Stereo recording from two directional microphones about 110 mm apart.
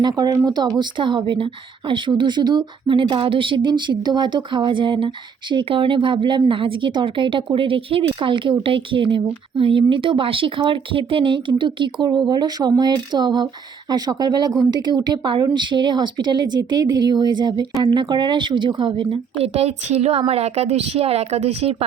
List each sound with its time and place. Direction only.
0.0 s speech: 40° right (ahead or behind); by 21.8 s 70° right (ahead or behind)